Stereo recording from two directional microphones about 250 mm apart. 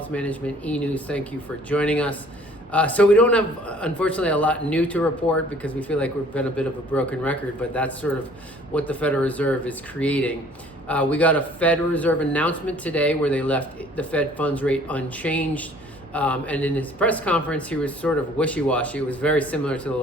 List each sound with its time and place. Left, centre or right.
0.1 s a man's voice: centre